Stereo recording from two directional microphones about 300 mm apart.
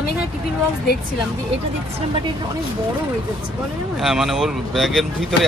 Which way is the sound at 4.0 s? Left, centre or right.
Centre.